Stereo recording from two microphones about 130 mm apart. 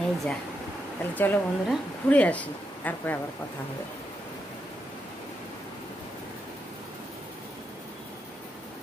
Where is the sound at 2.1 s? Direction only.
10° left (ahead or behind).